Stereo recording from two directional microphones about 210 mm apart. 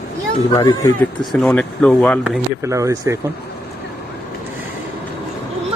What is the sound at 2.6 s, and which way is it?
Speech, 15° right (ahead or behind).